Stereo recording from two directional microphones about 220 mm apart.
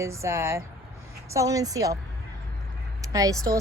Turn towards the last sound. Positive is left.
turn(degrees=-15)  # may be behind; listen again after turning